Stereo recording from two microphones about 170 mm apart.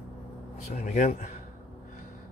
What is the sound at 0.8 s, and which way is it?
Speech, 45° left (ahead or behind).